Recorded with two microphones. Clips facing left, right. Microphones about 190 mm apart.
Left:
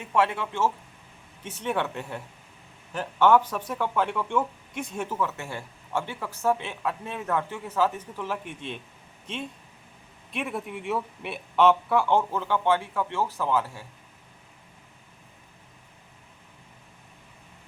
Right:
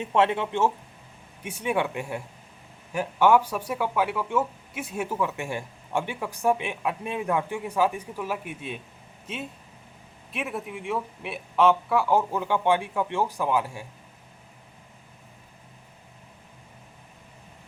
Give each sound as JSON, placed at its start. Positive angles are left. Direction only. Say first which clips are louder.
{"t": 0.0, "sound": "speech", "louder": "right 2 dB", "side_deg": -20}